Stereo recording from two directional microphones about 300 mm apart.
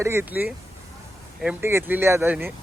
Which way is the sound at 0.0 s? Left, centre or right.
Centre.